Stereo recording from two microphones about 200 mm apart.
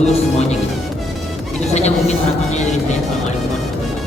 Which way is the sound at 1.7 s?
35° left (ahead or behind).